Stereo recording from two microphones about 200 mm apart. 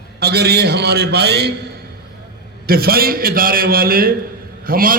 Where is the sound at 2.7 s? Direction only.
50° right (ahead or behind).